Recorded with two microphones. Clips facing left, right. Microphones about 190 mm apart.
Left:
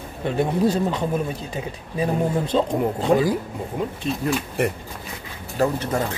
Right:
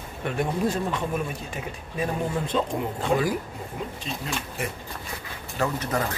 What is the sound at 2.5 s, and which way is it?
Speech, 35° left (ahead or behind).